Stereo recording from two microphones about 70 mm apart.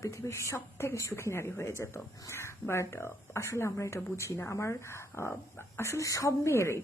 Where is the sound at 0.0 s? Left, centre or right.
Left.